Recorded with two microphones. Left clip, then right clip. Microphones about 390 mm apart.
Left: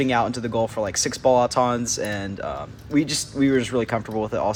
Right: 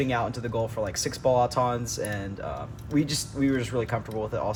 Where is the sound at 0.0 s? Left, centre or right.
Left.